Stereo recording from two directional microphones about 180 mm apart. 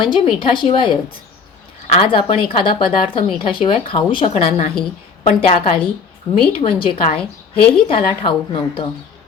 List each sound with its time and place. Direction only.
0.0 s a woman's voice: 30° left (ahead or behind)
5.2 s a woman's voice: 45° left (ahead or behind)
6.3 s a woman's voice: 30° left (ahead or behind)